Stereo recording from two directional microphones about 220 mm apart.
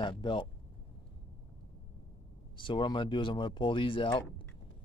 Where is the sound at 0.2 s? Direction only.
20° left (ahead or behind).